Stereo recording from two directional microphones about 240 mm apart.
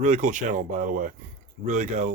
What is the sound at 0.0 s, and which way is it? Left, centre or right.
Speech, right.